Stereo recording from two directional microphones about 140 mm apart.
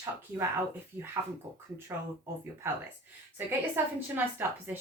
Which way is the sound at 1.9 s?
20° right (ahead or behind).